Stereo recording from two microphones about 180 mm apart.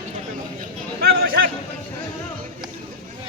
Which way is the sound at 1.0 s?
60° right (ahead or behind).